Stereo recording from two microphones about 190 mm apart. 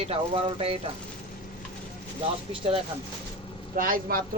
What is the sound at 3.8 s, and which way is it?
Speech, 50° right (ahead or behind).